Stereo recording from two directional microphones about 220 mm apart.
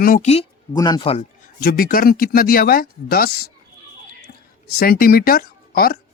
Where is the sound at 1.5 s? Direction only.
40° left (ahead or behind).